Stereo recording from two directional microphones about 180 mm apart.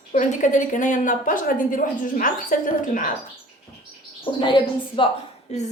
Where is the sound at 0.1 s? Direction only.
45° left (ahead or behind).